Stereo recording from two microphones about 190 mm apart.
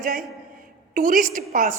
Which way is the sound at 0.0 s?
45° right (ahead or behind).